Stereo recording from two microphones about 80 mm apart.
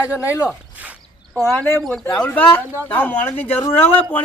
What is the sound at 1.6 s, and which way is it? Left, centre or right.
Speech, left.